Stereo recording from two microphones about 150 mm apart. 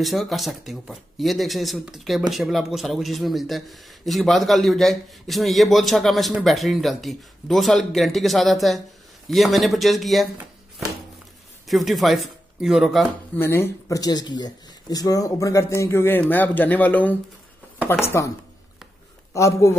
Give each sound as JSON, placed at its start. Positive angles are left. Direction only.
{"t": 0.0, "sound": "speech", "side_deg": 0}
{"t": 11.6, "sound": "speech", "side_deg": 0}
{"t": 13.4, "sound": "a man's voice", "side_deg": 15}
{"t": 19.3, "sound": "a man's voice", "side_deg": 20}